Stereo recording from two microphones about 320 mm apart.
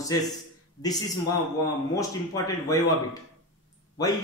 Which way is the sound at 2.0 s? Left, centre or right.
Centre.